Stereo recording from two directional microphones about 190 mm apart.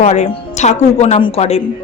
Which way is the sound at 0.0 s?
35° left (ahead or behind).